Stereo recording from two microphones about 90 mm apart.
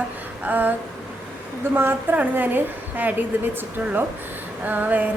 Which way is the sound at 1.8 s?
20° right (ahead or behind).